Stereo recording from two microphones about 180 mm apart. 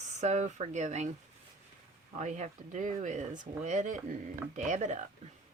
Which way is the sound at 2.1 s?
40° right (ahead or behind).